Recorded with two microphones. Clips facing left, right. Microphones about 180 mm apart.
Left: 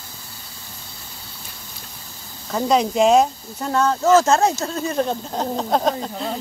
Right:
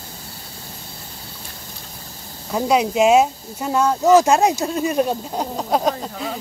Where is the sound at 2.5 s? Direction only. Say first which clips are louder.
Right 1 dB; 10° right (ahead or behind).